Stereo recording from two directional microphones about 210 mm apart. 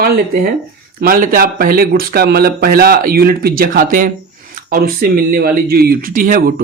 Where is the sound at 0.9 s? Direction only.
45° right (ahead or behind).